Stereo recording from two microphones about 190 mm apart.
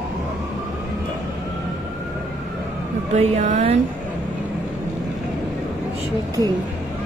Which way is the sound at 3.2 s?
35° right (ahead or behind).